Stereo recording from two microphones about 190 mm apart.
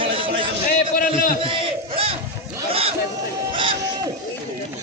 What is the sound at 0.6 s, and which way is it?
Speech, 45° left (ahead or behind).